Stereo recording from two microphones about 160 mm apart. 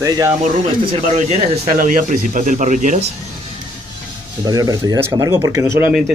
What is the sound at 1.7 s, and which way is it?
Speech, 60° right (ahead or behind).